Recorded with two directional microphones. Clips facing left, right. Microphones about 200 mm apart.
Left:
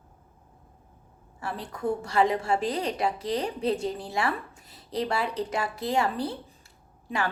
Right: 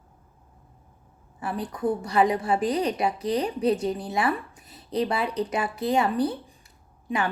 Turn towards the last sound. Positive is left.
turn(degrees=-20)  # may be behind; listen again after turning